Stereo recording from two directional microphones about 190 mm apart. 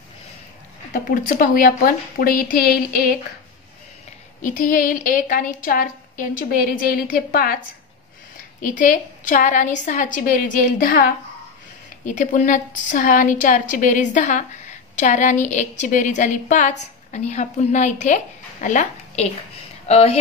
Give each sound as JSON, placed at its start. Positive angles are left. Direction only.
{"t": 0.9, "sound": "a woman's voice", "side_deg": 45}
{"t": 4.4, "sound": "a woman's voice", "side_deg": 45}
{"t": 8.6, "sound": "a woman's voice", "side_deg": 45}
{"t": 12.1, "sound": "a woman's voice", "side_deg": 40}